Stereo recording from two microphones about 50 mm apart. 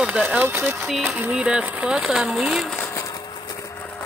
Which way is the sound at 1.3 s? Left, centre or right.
Right.